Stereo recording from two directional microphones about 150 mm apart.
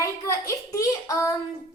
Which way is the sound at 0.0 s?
20° left (ahead or behind).